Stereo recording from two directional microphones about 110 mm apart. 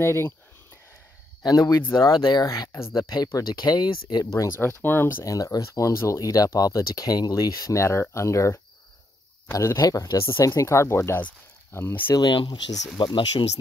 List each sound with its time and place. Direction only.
0.0 s speech: 25° left (ahead or behind)
1.4 s speech: 35° left (ahead or behind); by 5.1 s 20° left (ahead or behind)
5.2 s speech: 35° left (ahead or behind)
12.1 s speech: 45° left (ahead or behind)